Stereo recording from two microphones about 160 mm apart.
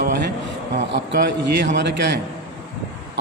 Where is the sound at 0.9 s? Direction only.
80° right.